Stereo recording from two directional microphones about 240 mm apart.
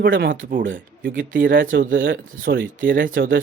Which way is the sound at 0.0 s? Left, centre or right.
Right.